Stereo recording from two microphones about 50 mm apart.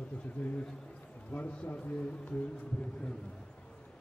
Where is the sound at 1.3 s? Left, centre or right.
Left.